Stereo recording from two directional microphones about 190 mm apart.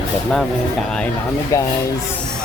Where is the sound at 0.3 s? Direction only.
Centre (ahead or behind).